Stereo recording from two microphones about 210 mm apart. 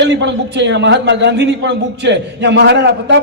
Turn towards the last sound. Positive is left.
turn(degrees=-55)  # may be behind; listen again after turning